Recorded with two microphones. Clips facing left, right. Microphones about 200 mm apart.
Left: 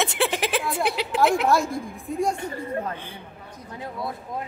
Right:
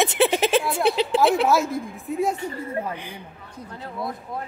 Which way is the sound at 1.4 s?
5° right (ahead or behind).